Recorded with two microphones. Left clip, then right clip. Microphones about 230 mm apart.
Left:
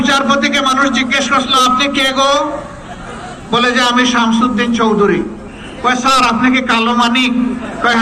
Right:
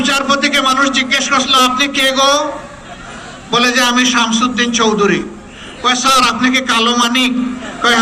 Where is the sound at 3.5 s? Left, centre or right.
Right.